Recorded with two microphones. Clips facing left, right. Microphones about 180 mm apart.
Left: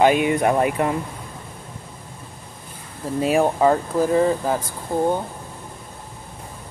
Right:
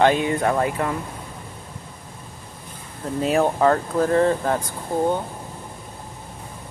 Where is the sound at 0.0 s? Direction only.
15° left (ahead or behind).